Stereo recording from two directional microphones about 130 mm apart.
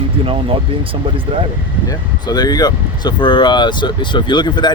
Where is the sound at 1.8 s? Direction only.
30° left (ahead or behind).